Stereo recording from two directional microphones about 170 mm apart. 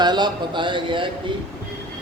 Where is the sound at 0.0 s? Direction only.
25° right (ahead or behind).